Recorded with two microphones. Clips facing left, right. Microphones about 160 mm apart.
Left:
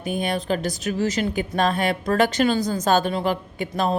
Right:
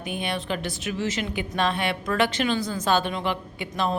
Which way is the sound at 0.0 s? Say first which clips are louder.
Left 5 dB; 40° left (ahead or behind).